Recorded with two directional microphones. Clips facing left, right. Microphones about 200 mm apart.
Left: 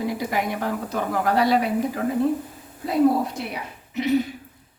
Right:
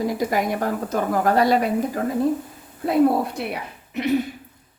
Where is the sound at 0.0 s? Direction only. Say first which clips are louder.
Right 3 dB; 45° right (ahead or behind).